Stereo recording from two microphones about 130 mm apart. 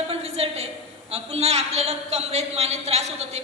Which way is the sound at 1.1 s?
50° right (ahead or behind).